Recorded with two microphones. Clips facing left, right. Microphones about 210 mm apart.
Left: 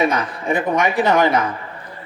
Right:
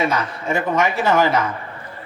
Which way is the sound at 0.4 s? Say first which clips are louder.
Left 1 dB; 15° left (ahead or behind).